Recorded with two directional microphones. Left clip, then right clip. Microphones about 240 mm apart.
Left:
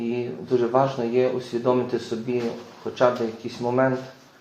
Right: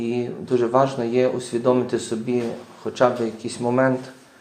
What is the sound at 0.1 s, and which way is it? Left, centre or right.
Speech, right.